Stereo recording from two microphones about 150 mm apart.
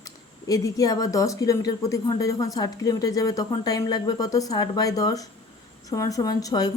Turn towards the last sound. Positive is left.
turn(degrees=25)  # may be behind; listen again after turning